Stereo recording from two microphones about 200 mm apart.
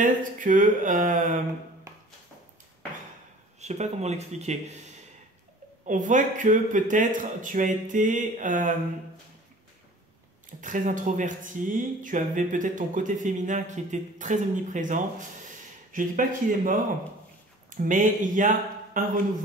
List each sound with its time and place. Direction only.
0.0 s speech: 40° right (ahead or behind)
3.6 s speech: 35° right (ahead or behind)
5.9 s speech: 40° right (ahead or behind)
10.6 s speech: 40° right (ahead or behind)